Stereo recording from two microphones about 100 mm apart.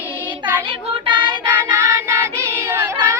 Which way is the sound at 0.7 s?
55° right (ahead or behind).